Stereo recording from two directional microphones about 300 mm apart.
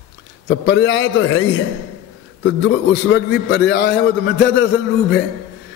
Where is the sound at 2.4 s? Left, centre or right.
Left.